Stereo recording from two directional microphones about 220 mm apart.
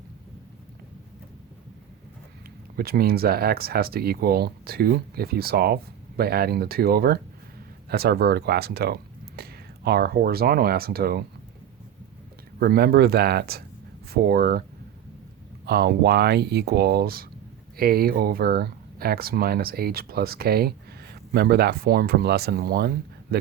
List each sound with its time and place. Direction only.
2.7 s speech: 45° right (ahead or behind)
12.5 s speech: 45° right (ahead or behind)
15.6 s speech: 45° right (ahead or behind)